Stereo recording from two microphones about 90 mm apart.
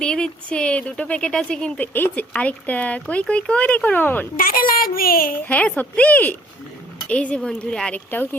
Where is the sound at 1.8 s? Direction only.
20° left (ahead or behind).